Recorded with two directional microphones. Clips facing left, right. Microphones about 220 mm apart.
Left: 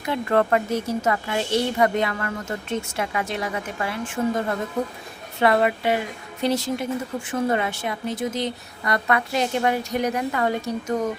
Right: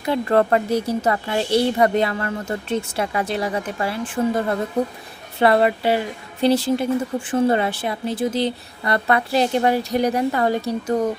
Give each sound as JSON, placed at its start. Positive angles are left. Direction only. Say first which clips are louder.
{"t": 0.0, "sound": "speech", "louder": "right 3 dB", "side_deg": -35}